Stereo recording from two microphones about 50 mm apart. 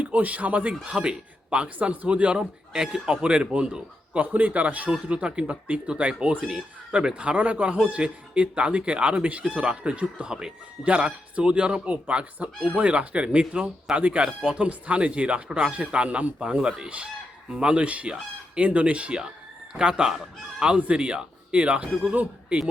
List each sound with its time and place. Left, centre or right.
0.0 s speech: right
4.2 s speech: right
6.4 s speech: centre; by 16.3 s right
16.4 s speech: centre